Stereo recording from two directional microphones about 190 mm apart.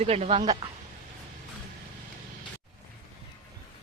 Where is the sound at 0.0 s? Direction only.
35° right (ahead or behind).